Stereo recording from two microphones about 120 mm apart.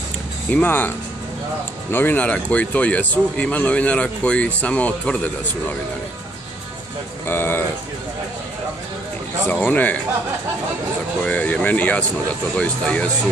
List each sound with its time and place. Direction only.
0.5 s speech: 15° left (ahead or behind)
7.2 s speech: 20° left (ahead or behind)
9.5 s speech: 15° left (ahead or behind)
11.2 s speech: 15° left (ahead or behind)